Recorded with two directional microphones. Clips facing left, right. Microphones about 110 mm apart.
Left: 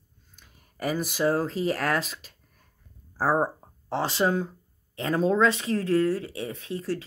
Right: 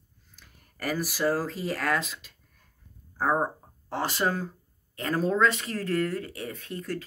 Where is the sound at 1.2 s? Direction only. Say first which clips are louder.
Left 2 dB; 25° left (ahead or behind).